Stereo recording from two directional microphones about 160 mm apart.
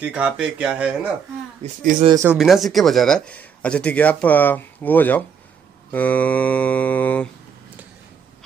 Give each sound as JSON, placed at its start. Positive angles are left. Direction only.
{"t": 0.0, "sound": "speech", "side_deg": -5}
{"t": 1.8, "sound": "speech", "side_deg": -60}
{"t": 2.2, "sound": "speech", "side_deg": 0}